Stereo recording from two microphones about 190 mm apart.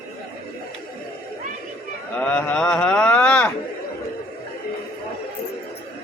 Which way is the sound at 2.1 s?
10° left (ahead or behind).